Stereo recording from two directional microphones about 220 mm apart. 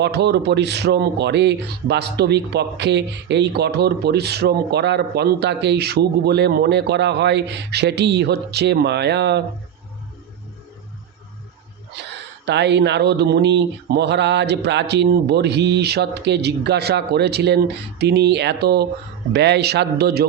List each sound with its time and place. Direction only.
0.0 s speech: 50° right (ahead or behind)
12.5 s speech: 50° right (ahead or behind)